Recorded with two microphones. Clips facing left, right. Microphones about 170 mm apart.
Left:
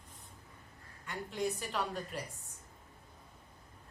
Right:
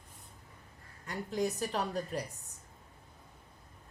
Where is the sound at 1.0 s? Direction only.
40° right (ahead or behind).